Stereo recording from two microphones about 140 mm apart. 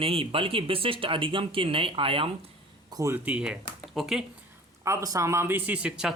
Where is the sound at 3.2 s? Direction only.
5° right (ahead or behind).